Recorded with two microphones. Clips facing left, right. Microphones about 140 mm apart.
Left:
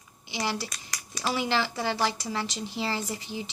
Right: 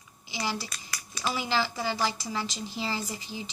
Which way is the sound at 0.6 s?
40° left (ahead or behind).